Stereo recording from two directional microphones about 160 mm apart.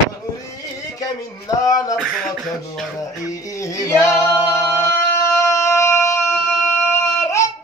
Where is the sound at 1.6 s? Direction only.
20° left (ahead or behind).